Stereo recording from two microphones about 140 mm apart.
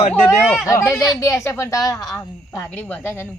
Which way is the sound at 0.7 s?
20° left (ahead or behind).